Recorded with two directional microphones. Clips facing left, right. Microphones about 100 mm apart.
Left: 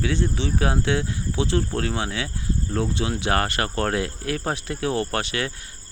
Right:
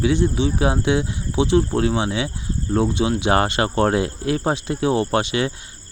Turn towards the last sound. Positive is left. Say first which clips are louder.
# right 6 dB
turn(degrees=-20)  # may be behind; listen again after turning